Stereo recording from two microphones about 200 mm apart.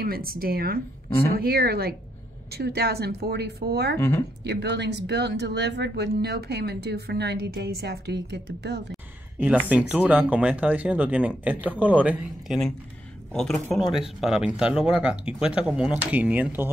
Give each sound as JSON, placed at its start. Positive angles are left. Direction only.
{"t": 0.0, "sound": "speech", "side_deg": -50}
{"t": 9.7, "sound": "speech", "side_deg": -5}